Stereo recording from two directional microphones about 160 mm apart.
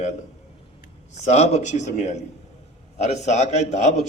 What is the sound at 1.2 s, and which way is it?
A man's voice, 45° left (ahead or behind).